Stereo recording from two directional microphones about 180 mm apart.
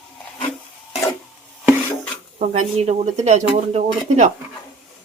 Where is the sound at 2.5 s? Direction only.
35° right (ahead or behind).